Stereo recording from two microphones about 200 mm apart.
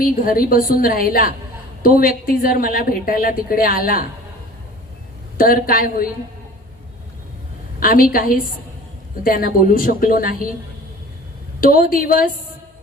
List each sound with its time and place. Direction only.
0.0 s a woman's voice: 45° left (ahead or behind)
5.4 s a woman's voice: 45° left (ahead or behind)
7.8 s a woman's voice: 45° left (ahead or behind)
11.6 s a woman's voice: 45° left (ahead or behind)